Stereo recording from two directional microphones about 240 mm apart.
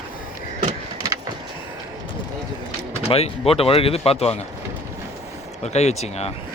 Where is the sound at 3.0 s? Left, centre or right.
Left.